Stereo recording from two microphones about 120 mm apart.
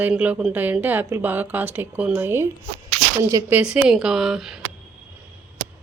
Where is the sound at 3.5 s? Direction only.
5° right (ahead or behind).